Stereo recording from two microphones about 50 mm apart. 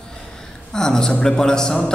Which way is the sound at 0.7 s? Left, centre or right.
Centre.